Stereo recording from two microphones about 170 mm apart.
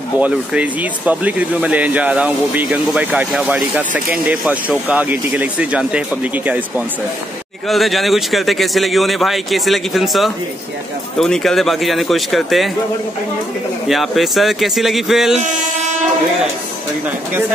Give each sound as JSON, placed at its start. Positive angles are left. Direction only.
{"t": 0.2, "sound": "speech", "side_deg": -10}
{"t": 7.6, "sound": "a man's voice", "side_deg": 0}
{"t": 13.8, "sound": "a man's voice", "side_deg": 0}
{"t": 15.4, "sound": "speech", "side_deg": -45}